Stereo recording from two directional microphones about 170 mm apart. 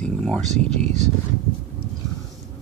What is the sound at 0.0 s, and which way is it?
Speech, 5° left (ahead or behind).